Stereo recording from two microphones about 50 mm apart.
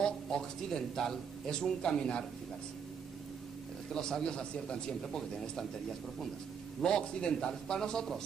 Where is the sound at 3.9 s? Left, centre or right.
Centre.